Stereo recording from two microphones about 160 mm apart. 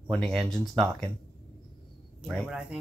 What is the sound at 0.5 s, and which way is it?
Speech, centre (ahead or behind).